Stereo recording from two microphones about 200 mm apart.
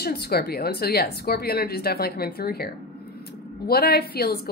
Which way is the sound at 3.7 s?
50° left (ahead or behind).